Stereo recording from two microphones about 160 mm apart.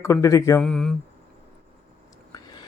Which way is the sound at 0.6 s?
5° left (ahead or behind).